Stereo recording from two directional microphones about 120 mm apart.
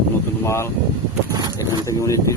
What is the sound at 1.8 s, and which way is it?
Speech, 25° left (ahead or behind).